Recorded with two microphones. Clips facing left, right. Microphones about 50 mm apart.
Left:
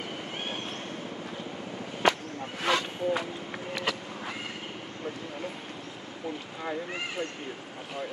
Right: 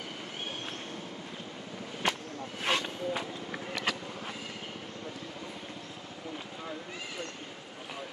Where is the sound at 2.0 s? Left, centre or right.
Left.